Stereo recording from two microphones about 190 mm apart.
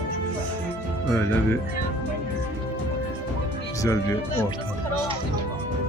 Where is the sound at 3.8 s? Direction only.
15° left (ahead or behind).